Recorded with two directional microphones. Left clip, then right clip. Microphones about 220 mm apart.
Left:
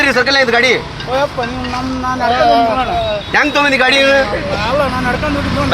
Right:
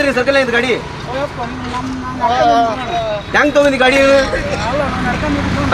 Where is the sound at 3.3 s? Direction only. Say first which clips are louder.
Right 1 dB; 50° left (ahead or behind).